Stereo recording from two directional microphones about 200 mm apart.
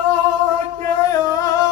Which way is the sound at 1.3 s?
15° left (ahead or behind).